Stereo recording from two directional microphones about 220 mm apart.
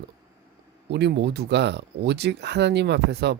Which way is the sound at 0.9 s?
50° right (ahead or behind).